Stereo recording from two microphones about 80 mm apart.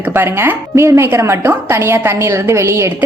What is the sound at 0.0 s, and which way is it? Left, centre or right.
A woman's voice, right.